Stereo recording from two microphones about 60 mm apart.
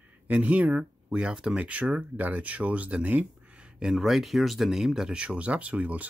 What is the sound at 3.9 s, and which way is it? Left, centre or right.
Speech, centre.